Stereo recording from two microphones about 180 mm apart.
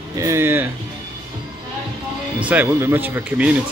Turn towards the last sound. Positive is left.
turn(degrees=-5)  # may be behind; listen again after turning